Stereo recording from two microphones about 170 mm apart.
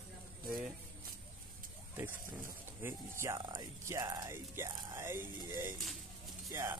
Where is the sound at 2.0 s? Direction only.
15° right (ahead or behind).